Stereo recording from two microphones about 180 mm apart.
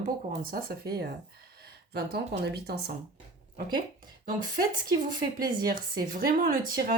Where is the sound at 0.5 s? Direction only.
60° right (ahead or behind).